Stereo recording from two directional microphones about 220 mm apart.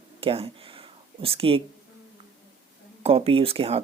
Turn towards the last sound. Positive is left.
turn(degrees=-25)  # may be behind; listen again after turning